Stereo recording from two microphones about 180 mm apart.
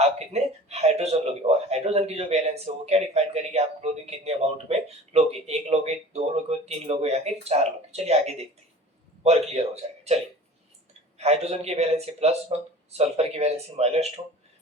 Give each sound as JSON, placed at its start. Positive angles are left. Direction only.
{"t": 0.3, "sound": "a sound", "side_deg": -35}
{"t": 0.7, "sound": "a man's voice", "side_deg": -35}
{"t": 11.2, "sound": "a man's voice", "side_deg": -35}